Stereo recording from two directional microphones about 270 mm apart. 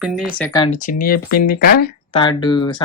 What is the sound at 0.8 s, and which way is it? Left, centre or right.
Speech, left.